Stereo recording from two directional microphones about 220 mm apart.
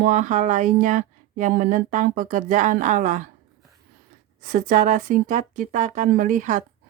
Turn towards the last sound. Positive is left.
turn(degrees=-35)  # may be behind; listen again after turning